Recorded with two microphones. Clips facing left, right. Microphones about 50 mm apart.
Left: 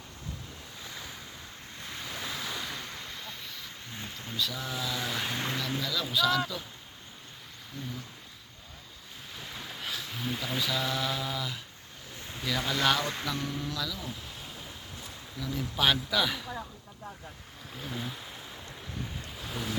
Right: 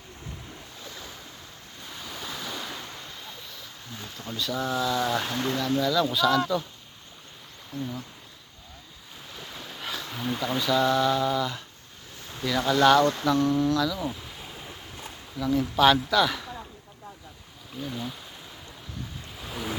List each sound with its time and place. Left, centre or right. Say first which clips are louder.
0.9 s waves: even; centre
3.9 s stream: right 2 dB; left
4.3 s speech: right 6 dB; centre
5.3 s speech: right 6 dB; centre
7.7 s speech: right 8 dB; centre
9.3 s speech: right 1 dB; centre
14.6 s waves: right 3 dB; right
15.8 s speech: right 6 dB; centre
17.7 s speech: right 4 dB; centre
19.4 s waves: right 2 dB; centre